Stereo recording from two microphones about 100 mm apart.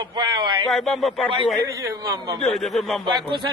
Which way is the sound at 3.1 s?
50° right (ahead or behind).